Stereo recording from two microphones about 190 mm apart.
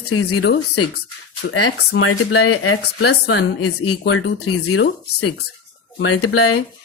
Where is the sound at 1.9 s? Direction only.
90° left; by 3.4 s 60° left (ahead or behind).